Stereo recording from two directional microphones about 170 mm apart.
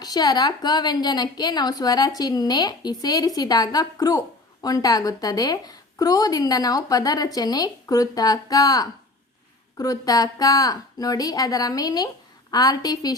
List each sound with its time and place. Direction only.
0.0 s a woman's voice: 25° left (ahead or behind)